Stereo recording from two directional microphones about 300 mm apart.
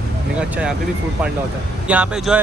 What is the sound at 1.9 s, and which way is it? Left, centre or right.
Speech, centre.